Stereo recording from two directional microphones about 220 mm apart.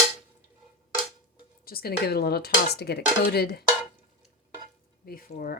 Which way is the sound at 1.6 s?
45° left (ahead or behind).